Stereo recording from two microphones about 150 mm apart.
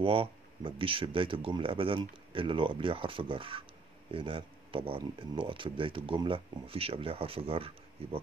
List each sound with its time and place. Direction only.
0.0 s speech: 35° right (ahead or behind)